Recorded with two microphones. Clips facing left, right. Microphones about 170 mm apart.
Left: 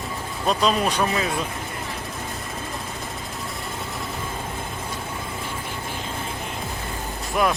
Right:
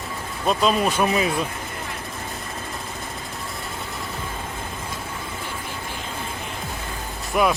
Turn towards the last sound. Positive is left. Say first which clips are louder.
# right 2 dB
turn(degrees=-5)  # may be behind; listen again after turning